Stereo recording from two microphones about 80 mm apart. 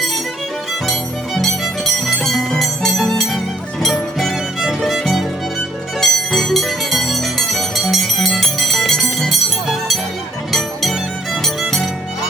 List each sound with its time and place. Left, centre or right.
1.4 s music: centre